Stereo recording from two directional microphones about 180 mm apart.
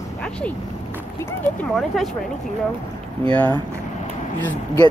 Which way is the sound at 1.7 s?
Centre (ahead or behind).